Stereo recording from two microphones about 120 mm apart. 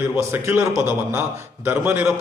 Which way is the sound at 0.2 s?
25° right (ahead or behind).